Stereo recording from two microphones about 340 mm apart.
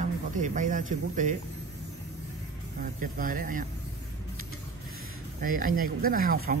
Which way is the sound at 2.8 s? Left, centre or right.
Right.